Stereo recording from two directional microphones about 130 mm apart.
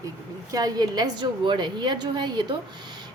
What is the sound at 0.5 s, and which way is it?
A woman's voice, 30° right (ahead or behind).